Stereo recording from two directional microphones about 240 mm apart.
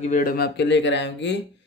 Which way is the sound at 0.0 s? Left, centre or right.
Left.